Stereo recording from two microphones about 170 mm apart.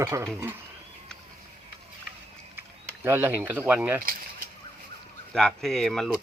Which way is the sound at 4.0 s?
55° right (ahead or behind).